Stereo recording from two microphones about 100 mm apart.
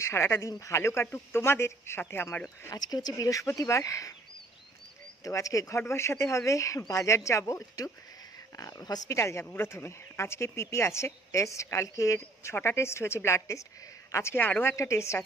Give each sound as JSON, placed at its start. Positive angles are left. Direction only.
{"t": 0.0, "sound": "speech", "side_deg": 25}
{"t": 2.7, "sound": "speech", "side_deg": 40}
{"t": 5.2, "sound": "speech", "side_deg": 35}